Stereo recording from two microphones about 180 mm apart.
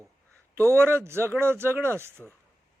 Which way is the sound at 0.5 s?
15° right (ahead or behind).